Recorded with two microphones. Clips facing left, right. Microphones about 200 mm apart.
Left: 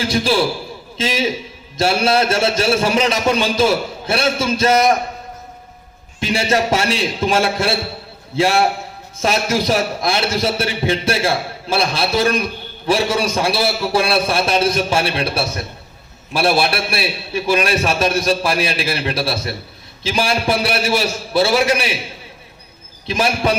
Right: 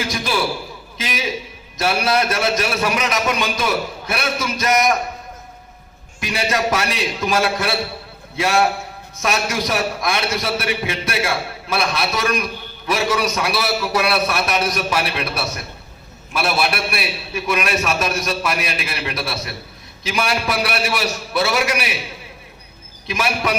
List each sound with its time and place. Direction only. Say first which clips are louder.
0.0 s a man's voice: left 5 dB; 30° left (ahead or behind)
6.1 s a man's voice: left 4 dB; 30° left (ahead or behind)
23.0 s a man's voice: left 4 dB; 30° left (ahead or behind)